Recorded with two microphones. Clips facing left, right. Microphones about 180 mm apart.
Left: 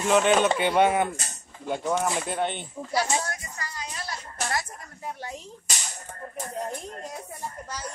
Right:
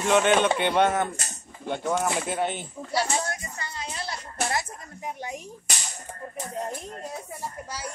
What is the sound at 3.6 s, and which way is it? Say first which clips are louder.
Music: right 2 dB; 25° right (ahead or behind).